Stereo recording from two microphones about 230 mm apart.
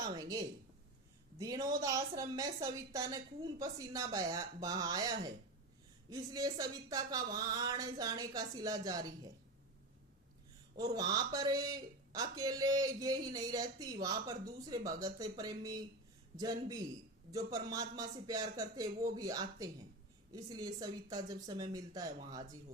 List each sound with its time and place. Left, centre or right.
0.0 s a woman's voice: centre
10.8 s a woman's voice: centre